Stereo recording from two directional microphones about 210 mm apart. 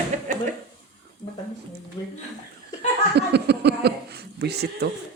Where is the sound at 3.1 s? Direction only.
50° right (ahead or behind).